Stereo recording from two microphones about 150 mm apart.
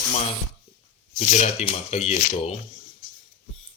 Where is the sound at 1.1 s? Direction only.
55° left (ahead or behind).